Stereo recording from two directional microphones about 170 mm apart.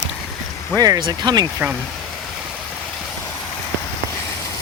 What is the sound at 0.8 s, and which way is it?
Speech, 25° right (ahead or behind).